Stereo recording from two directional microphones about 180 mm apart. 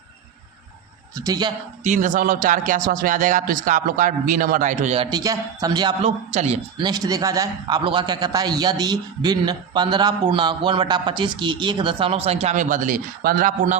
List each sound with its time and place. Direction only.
1.1 s a man's voice: 20° right (ahead or behind)
1.8 s speech: 45° right (ahead or behind)
5.1 s a man's voice: 20° right (ahead or behind); by 13.7 s 50° right (ahead or behind)